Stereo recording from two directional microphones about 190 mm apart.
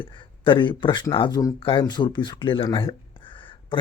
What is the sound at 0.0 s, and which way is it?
Speech, 25° left (ahead or behind).